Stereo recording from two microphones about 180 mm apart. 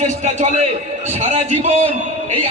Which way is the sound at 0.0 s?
40° right (ahead or behind).